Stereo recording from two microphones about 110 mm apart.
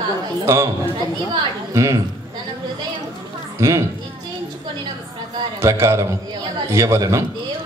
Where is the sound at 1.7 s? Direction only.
30° right (ahead or behind).